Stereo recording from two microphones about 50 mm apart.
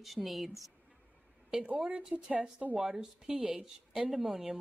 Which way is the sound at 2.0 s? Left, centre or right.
Centre.